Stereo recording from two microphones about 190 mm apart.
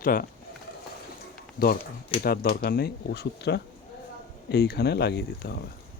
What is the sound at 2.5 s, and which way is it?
Speech, 55° left (ahead or behind).